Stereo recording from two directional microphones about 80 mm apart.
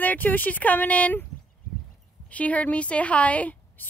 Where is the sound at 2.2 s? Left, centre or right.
Centre.